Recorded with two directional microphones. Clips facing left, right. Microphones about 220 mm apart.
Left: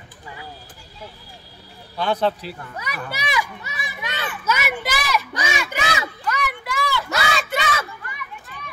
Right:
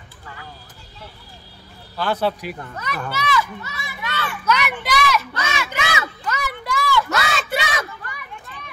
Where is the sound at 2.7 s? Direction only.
15° left (ahead or behind).